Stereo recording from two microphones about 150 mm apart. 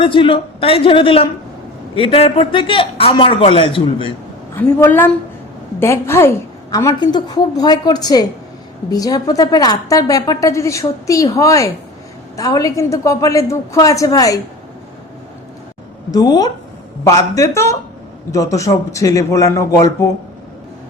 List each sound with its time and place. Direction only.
0.0 s a man's voice: 35° left (ahead or behind)
4.5 s a woman's voice: 15° left (ahead or behind)
16.1 s a woman's voice: 25° left (ahead or behind)